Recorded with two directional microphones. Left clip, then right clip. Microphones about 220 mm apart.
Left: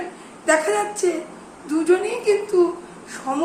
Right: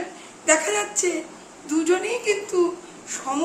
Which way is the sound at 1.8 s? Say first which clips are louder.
Left 4 dB; 20° right (ahead or behind).